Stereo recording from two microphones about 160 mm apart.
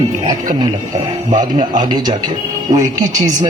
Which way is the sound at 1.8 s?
30° right (ahead or behind).